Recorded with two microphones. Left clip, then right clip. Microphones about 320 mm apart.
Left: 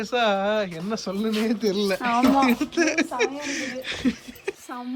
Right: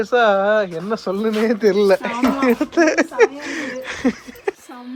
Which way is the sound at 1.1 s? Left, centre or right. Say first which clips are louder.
Right 6 dB; right.